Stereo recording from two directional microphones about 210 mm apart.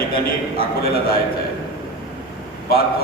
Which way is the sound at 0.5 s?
45° left (ahead or behind).